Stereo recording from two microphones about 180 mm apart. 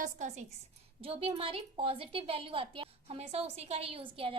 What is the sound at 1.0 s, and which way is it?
A woman's voice, 30° right (ahead or behind).